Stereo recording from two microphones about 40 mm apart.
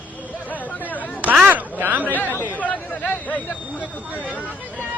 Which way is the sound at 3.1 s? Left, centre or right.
Left.